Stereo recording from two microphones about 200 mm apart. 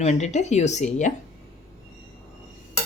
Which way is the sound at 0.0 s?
35° left (ahead or behind).